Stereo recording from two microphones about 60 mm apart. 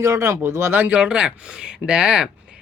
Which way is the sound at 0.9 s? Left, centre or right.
Centre.